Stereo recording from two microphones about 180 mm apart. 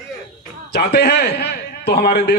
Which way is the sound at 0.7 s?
65° left (ahead or behind).